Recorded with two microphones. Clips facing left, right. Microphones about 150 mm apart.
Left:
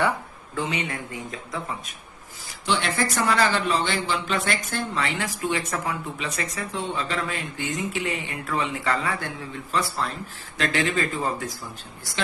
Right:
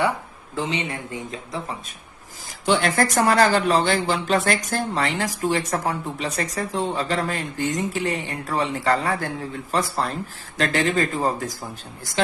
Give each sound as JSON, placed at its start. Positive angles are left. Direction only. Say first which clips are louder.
{"t": 0.5, "sound": "speech", "louder": "right 2 dB", "side_deg": -30}
{"t": 2.6, "sound": "a man's voice", "louder": "right 5 dB", "side_deg": -45}